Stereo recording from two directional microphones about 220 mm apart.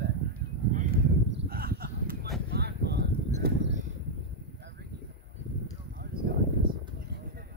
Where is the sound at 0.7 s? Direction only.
35° right (ahead or behind).